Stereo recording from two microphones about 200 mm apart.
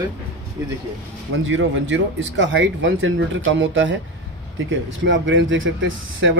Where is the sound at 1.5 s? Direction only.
65° right (ahead or behind).